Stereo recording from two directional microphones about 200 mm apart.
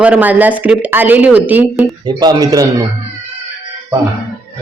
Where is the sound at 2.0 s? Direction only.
20° right (ahead or behind).